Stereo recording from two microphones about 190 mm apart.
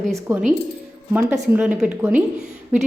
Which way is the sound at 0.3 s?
5° right (ahead or behind).